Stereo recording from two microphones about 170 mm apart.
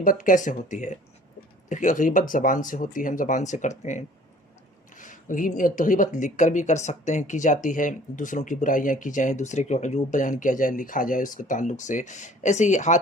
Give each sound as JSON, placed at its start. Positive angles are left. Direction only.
{"t": 0.0, "sound": "speech", "side_deg": 50}